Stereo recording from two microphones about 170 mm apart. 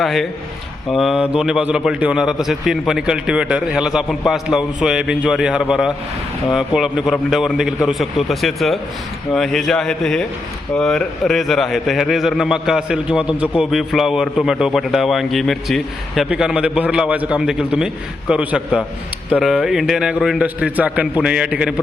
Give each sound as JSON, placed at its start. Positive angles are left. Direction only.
{"t": 0.0, "sound": "a man's voice", "side_deg": 0}